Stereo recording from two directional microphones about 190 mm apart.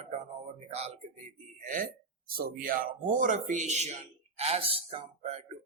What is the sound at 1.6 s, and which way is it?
A man's voice, 45° right (ahead or behind).